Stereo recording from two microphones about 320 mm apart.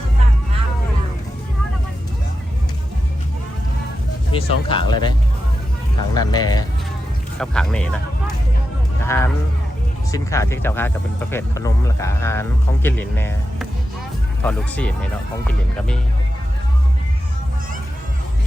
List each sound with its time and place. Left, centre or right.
4.3 s speech: centre
6.1 s speech: centre
9.0 s speech: centre